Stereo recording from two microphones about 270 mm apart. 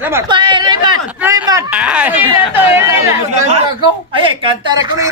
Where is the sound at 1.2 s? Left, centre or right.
Centre.